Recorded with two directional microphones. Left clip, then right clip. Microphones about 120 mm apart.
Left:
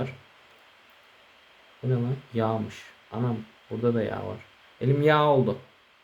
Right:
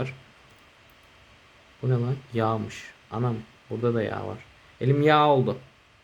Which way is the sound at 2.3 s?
45° right (ahead or behind).